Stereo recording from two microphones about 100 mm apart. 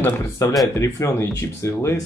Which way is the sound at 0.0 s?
35° left (ahead or behind).